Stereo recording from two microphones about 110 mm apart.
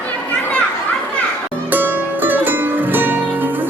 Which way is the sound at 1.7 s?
15° right (ahead or behind).